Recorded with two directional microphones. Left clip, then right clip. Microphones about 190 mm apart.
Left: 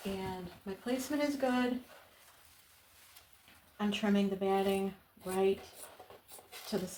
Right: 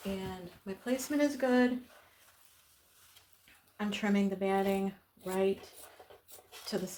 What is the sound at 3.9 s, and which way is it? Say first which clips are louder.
Speech: even; 50° right (ahead or behind).